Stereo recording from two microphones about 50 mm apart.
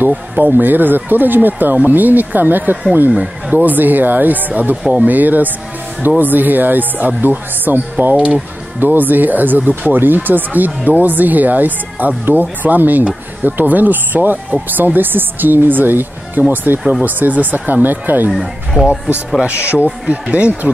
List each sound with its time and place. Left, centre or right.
0.4 s speech: right
3.1 s speech: right
13.0 s speech: right
13.6 s speech: right